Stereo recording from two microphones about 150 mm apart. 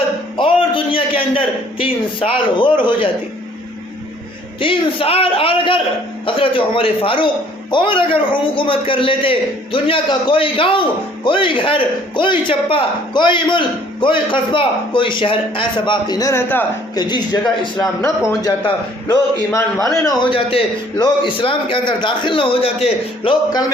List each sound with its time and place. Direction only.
0.3 s a man's voice: 35° left (ahead or behind)
4.6 s a man's voice: 35° left (ahead or behind); by 16.6 s 15° left (ahead or behind)
16.9 s a man's voice: 30° left (ahead or behind)
19.0 s a man's voice: 20° left (ahead or behind)
20.3 s a man's voice: 40° left (ahead or behind)
23.5 s a man's voice: 25° left (ahead or behind)